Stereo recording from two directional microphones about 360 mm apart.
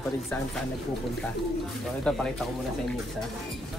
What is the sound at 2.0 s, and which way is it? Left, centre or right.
Speech, centre.